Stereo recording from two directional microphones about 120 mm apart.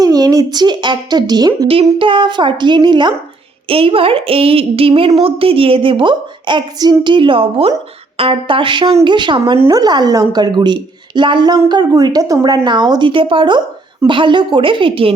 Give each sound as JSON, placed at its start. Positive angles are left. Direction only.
{"t": 0.0, "sound": "a woman's voice", "side_deg": -30}
{"t": 1.6, "sound": "a woman's voice", "side_deg": -50}
{"t": 3.7, "sound": "a woman's voice", "side_deg": -50}